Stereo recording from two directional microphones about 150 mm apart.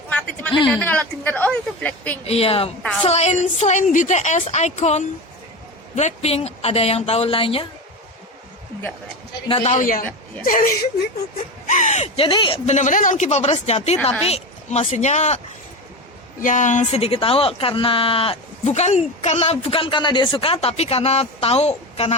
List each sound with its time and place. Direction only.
0.1 s a sound: 10° left (ahead or behind)
0.7 s a woman's voice: 10° left (ahead or behind)
2.2 s a woman's voice: 40° left (ahead or behind)
9.5 s a woman's voice: 45° left (ahead or behind); by 10.7 s 65° left (ahead or behind)
11.7 s speech: 55° left (ahead or behind); by 12.5 s 35° left (ahead or behind)
12.6 s a woman's voice: 55° left (ahead or behind)
16.4 s speech: 55° left (ahead or behind)